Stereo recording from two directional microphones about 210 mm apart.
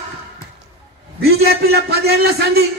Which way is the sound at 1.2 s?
50° right (ahead or behind).